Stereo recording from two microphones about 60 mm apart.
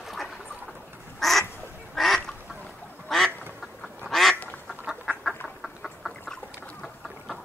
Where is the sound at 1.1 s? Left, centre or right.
Centre.